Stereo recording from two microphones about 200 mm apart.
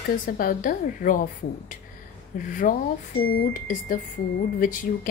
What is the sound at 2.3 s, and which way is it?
A woman's voice, 40° left (ahead or behind).